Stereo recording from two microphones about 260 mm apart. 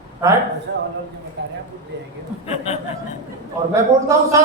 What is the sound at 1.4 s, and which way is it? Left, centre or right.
Speech, right.